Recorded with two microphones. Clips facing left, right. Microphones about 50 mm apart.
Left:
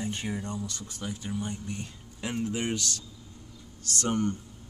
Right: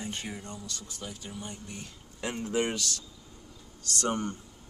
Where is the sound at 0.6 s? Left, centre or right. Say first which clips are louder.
Left 4 dB; left.